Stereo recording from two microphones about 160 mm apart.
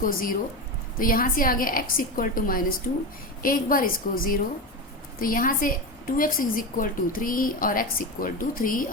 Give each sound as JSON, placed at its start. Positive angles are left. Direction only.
{"t": 0.0, "sound": "a woman's voice", "side_deg": 60}